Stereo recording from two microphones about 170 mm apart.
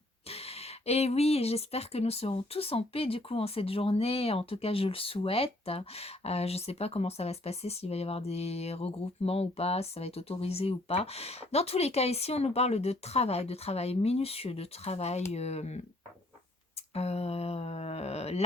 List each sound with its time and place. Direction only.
0.3 s speech: 35° left (ahead or behind)
16.9 s speech: 35° left (ahead or behind)